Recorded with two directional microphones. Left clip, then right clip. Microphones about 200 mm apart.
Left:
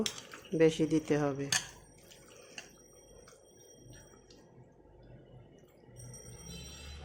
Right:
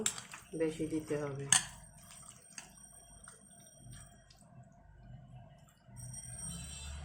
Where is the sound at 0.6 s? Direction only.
55° left (ahead or behind).